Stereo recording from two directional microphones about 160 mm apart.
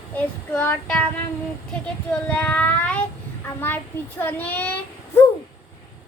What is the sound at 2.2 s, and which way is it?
Child singing, 10° left (ahead or behind).